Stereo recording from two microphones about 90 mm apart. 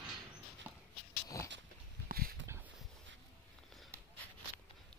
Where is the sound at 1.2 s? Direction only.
40° left (ahead or behind).